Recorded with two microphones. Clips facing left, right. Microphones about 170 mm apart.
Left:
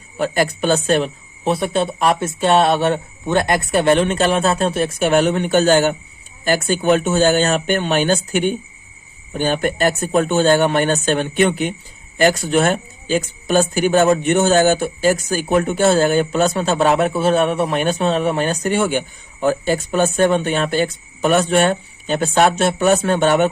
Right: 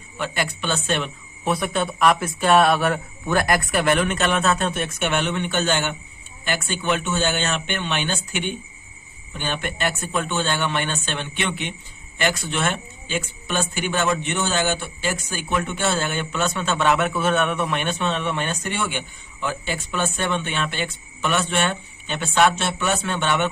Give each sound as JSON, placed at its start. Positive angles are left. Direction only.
{"t": 0.2, "sound": "speech", "side_deg": 40}